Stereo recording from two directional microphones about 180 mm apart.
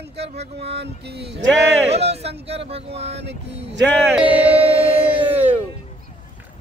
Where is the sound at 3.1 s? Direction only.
70° right (ahead or behind).